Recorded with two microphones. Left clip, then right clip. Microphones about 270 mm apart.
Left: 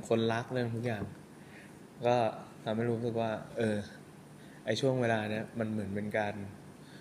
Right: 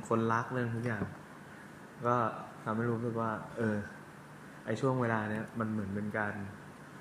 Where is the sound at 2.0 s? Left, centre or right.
Left.